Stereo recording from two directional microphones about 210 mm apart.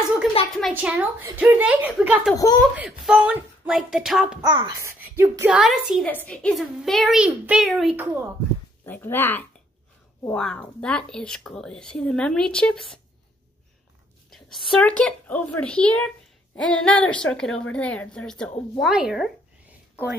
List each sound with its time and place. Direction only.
0.6 s a woman's voice: centre (ahead or behind)
2.3 s speech: 15° left (ahead or behind)
2.8 s a woman's voice: 5° right (ahead or behind)
4.4 s a woman's voice: 20° right (ahead or behind)
8.8 s a woman's voice: 10° left (ahead or behind)
14.3 s a woman's voice: centre (ahead or behind)